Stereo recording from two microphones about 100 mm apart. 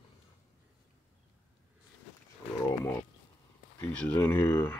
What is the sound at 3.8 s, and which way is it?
Speech, 20° left (ahead or behind).